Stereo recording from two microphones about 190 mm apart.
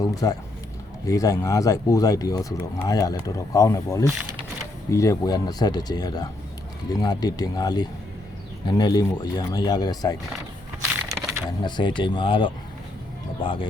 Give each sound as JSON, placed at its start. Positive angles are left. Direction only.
{"t": 0.0, "sound": "speech", "side_deg": 20}
{"t": 11.1, "sound": "a sound", "side_deg": -15}
{"t": 11.6, "sound": "speech", "side_deg": 25}